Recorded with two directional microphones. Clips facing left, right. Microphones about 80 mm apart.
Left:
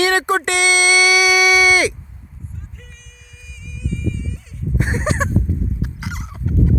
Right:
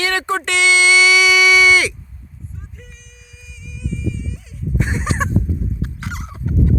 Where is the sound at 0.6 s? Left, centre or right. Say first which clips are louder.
Right 4 dB; left.